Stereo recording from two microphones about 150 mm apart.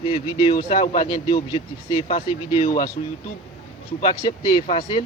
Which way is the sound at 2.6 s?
65° left (ahead or behind).